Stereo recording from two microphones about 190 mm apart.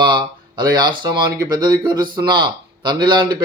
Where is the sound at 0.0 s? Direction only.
25° right (ahead or behind).